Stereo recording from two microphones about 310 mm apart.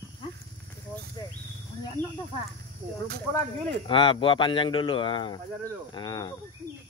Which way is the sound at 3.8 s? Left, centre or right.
Centre.